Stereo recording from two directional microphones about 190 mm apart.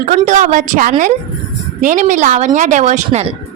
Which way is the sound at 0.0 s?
40° right (ahead or behind).